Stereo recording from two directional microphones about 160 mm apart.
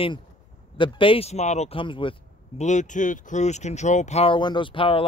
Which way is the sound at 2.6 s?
50° left (ahead or behind).